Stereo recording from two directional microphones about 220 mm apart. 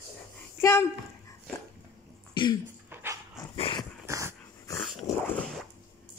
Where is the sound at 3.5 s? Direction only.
20° left (ahead or behind).